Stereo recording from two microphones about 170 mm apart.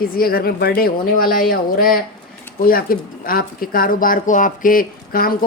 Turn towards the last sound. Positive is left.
turn(degrees=60)  # may be behind; listen again after turning